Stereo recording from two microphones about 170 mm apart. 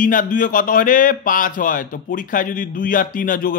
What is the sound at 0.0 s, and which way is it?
Speech, 50° left (ahead or behind).